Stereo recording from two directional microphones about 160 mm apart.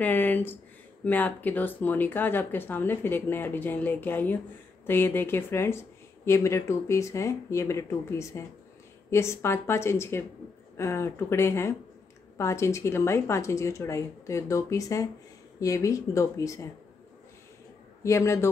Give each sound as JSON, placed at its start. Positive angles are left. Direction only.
{"t": 0.0, "sound": "speech", "side_deg": 10}
{"t": 18.0, "sound": "speech", "side_deg": 20}